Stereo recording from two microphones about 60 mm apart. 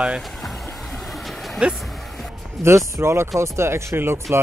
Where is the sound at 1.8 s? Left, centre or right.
Centre.